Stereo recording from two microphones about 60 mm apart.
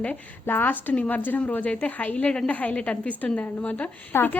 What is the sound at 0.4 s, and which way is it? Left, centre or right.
A woman's voice, left.